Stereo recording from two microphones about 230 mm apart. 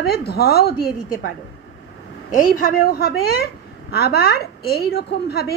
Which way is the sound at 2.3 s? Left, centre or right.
Left.